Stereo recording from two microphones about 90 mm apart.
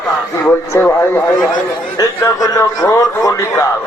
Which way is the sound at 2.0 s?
40° left (ahead or behind).